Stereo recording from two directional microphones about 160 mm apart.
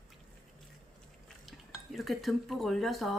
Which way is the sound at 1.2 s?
Centre (ahead or behind).